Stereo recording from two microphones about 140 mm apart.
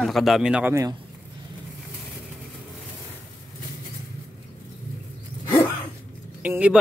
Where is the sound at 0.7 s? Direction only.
20° right (ahead or behind).